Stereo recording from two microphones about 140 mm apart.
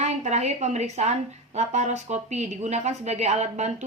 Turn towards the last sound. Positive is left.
turn(degrees=-55)  # may be behind; listen again after turning